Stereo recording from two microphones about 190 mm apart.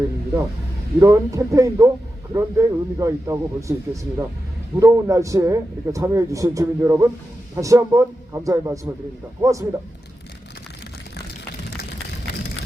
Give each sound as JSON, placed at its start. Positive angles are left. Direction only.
{"t": 0.9, "sound": "a man's voice", "side_deg": -15}
{"t": 4.8, "sound": "a man's voice", "side_deg": -15}
{"t": 11.8, "sound": "vehicle", "side_deg": 60}